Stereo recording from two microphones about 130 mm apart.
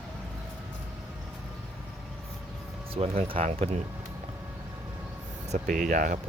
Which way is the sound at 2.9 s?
45° right (ahead or behind).